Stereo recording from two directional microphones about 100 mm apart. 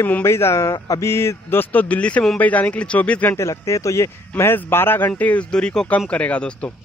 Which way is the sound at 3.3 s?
30° left (ahead or behind).